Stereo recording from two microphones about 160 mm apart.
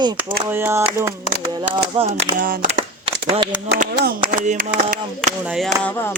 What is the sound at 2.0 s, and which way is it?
Speech, 40° right (ahead or behind).